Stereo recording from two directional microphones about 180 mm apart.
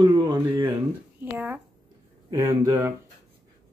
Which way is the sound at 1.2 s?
10° right (ahead or behind).